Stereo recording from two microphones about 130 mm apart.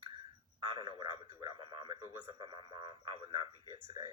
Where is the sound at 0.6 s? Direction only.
40° right (ahead or behind).